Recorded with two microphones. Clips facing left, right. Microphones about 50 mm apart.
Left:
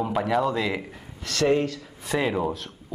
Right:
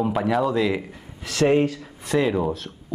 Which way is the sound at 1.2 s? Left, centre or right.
Centre.